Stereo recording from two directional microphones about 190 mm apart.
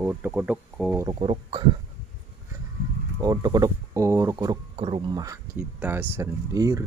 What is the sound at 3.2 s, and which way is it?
Speech, 20° right (ahead or behind).